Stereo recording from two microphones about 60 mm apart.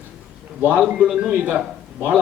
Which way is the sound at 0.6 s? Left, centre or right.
Right.